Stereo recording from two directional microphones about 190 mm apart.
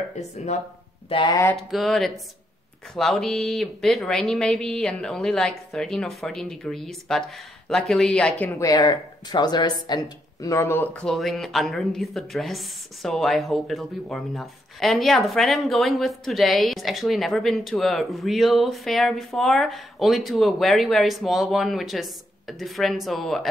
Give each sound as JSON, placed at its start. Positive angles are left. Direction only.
{"t": 1.0, "sound": "speech", "side_deg": 25}
{"t": 1.4, "sound": "a sound", "side_deg": 10}
{"t": 1.7, "sound": "speech", "side_deg": 0}